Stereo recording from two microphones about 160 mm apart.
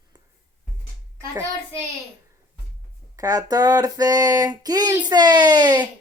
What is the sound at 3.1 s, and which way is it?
Speech, 20° right (ahead or behind).